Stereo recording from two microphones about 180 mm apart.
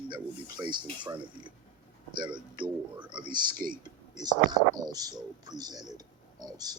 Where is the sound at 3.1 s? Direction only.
25° right (ahead or behind).